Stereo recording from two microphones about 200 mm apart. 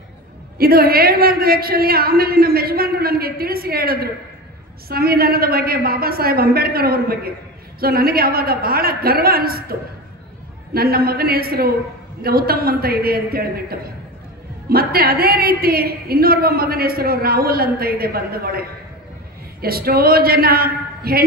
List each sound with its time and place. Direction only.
0.6 s a woman's voice: 50° right (ahead or behind)